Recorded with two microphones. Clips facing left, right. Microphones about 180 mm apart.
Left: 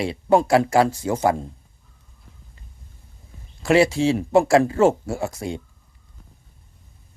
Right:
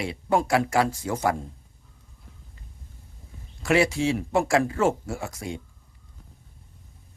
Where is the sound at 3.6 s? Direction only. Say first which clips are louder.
Left 5 dB; 30° left (ahead or behind).